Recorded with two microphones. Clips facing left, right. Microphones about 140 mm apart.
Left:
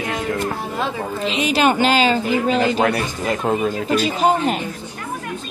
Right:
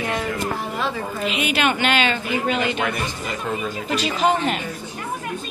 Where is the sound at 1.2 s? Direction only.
35° left (ahead or behind).